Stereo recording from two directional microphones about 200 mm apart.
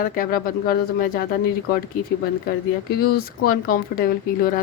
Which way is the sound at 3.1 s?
45° left (ahead or behind).